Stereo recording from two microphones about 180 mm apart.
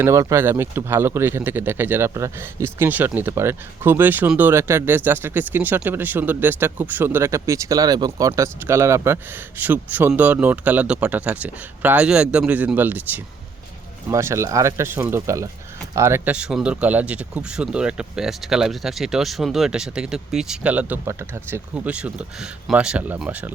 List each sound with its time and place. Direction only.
0.0 s speech: 15° right (ahead or behind)